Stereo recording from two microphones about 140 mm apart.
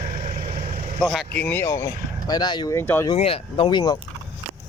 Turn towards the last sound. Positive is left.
turn(degrees=30)  # may be behind; listen again after turning